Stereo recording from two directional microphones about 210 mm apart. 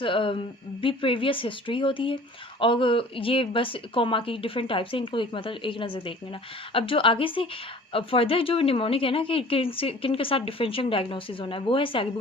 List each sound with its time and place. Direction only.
0.0 s speech: 25° left (ahead or behind)